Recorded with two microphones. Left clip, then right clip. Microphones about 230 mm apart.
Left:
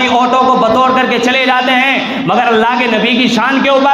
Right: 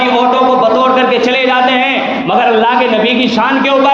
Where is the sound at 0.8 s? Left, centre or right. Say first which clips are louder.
Right 1 dB; left.